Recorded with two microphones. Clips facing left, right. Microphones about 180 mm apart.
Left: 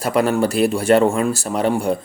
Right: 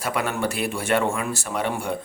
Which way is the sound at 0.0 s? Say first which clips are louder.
Left 8 dB; 35° left (ahead or behind).